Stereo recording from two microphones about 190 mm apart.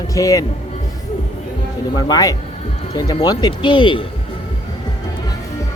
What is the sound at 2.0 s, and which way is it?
Speech, 20° left (ahead or behind).